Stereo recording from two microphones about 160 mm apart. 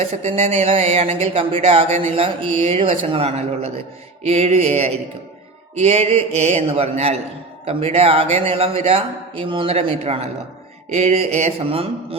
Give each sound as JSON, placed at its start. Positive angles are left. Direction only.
{"t": 0.0, "sound": "speech", "side_deg": -40}